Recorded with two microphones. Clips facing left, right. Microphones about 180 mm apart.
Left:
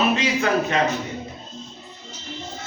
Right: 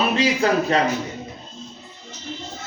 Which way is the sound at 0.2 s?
35° right (ahead or behind).